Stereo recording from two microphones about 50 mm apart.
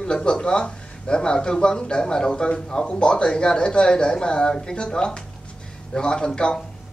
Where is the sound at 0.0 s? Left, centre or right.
Centre.